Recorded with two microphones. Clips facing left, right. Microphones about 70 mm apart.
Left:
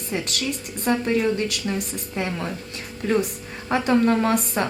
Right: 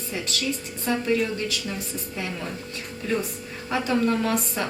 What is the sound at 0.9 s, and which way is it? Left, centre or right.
Speech, left.